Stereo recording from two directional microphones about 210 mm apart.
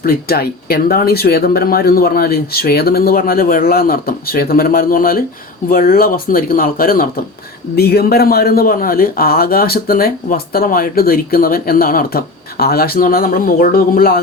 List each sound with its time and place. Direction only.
0.0 s a man's voice: 45° left (ahead or behind)